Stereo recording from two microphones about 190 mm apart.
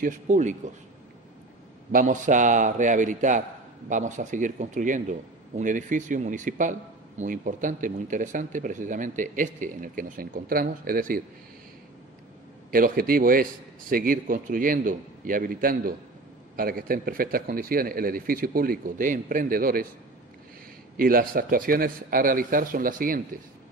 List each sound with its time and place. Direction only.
0.0 s a man's voice: 40° right (ahead or behind)
1.9 s a man's voice: 45° right (ahead or behind)
12.7 s a man's voice: 50° right (ahead or behind)
20.9 s a man's voice: 50° right (ahead or behind)